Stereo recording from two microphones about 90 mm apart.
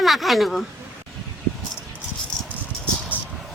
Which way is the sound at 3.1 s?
20° right (ahead or behind).